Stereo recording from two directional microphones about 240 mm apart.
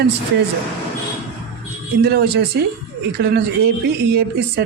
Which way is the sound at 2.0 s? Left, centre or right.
Right.